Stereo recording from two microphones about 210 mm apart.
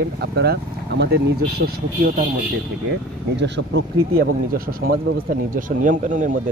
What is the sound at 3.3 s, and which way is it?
Speech, 55° right (ahead or behind).